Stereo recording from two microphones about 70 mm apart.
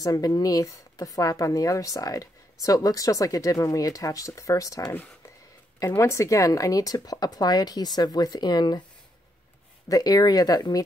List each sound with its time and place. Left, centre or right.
0.0 s speech: left
5.9 s speech: left
9.8 s speech: left